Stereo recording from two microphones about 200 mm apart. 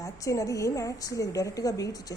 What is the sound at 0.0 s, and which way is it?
A woman's voice, 15° left (ahead or behind).